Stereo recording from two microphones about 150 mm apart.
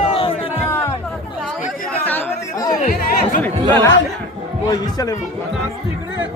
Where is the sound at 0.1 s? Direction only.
40° left (ahead or behind).